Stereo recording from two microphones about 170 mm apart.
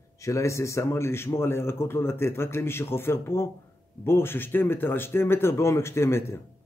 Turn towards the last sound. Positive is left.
turn(degrees=15)  # may be behind; listen again after turning